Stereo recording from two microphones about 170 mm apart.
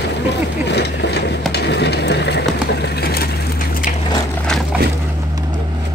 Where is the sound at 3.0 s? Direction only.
65° left (ahead or behind).